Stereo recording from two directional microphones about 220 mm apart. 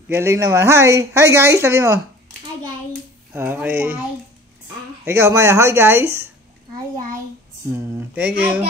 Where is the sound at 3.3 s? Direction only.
10° right (ahead or behind).